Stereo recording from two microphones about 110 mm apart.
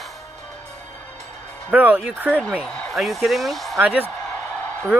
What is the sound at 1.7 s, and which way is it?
Speech, 15° right (ahead or behind).